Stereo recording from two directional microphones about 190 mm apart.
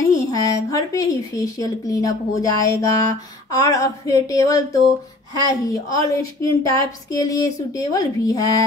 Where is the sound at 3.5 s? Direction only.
15° left (ahead or behind).